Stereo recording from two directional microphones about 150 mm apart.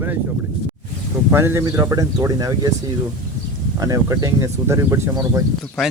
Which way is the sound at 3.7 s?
25° right (ahead or behind).